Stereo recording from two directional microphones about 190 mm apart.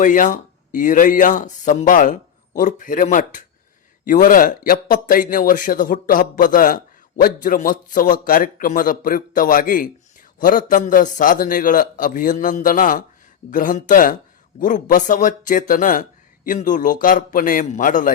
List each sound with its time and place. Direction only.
0.0 s a man's voice: 45° left (ahead or behind)